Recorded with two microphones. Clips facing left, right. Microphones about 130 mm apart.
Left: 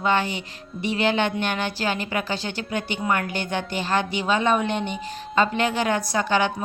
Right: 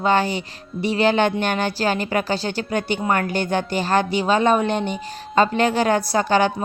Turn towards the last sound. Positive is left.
turn(degrees=-40)  # may be behind; listen again after turning